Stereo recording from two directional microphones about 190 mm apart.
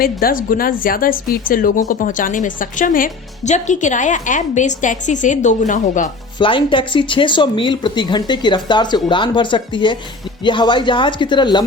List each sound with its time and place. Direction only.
0.0 s speech: 50° left (ahead or behind)
6.4 s speech: 25° left (ahead or behind)